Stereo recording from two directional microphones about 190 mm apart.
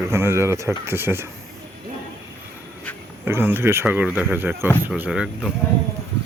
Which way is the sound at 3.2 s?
10° right (ahead or behind).